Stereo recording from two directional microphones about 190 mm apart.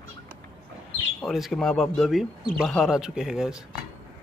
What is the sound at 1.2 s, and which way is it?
Speech, centre (ahead or behind).